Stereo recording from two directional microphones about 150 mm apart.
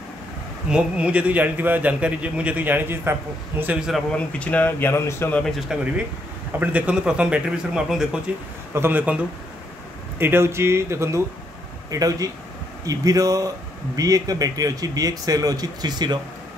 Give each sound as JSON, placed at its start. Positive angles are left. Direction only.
{"t": 0.7, "sound": "a man's voice", "side_deg": -5}
{"t": 4.1, "sound": "speech", "side_deg": 10}
{"t": 5.4, "sound": "a man's voice", "side_deg": 0}